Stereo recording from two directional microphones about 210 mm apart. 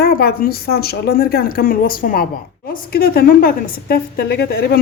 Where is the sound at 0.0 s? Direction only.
50° left (ahead or behind).